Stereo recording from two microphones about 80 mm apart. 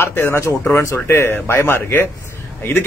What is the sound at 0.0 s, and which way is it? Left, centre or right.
A man's voice, left.